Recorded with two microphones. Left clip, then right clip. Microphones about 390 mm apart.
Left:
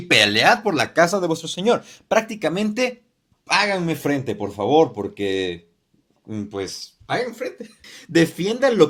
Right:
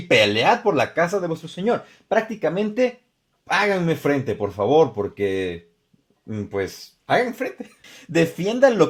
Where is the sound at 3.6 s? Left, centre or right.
Right.